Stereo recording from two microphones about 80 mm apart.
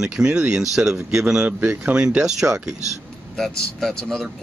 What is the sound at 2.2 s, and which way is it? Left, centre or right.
Speech, centre.